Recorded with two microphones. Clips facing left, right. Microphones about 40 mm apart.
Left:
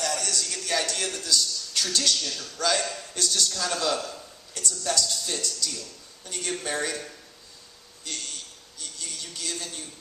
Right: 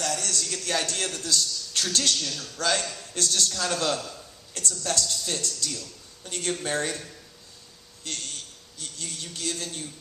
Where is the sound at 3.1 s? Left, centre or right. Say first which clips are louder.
Right 1 dB; right.